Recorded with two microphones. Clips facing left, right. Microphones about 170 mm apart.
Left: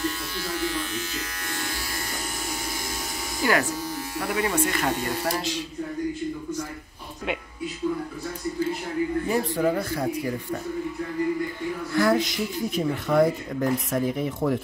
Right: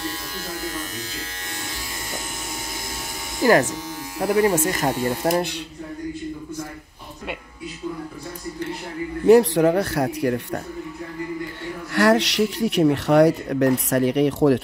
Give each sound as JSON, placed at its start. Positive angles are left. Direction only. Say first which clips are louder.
{"t": 0.0, "sound": "electric shaver", "louder": "left 1 dB", "side_deg": -40}
{"t": 4.2, "sound": "speech", "louder": "right 7 dB", "side_deg": -40}
{"t": 4.9, "sound": "speech", "louder": "right 5 dB", "side_deg": -15}
{"t": 5.3, "sound": "speech", "louder": "right 6 dB", "side_deg": -60}
{"t": 9.2, "sound": "speech", "louder": "right 15 dB", "side_deg": -75}
{"t": 11.9, "sound": "speech", "louder": "right 4 dB", "side_deg": -80}